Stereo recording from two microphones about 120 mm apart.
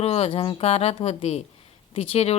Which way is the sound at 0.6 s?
60° left (ahead or behind).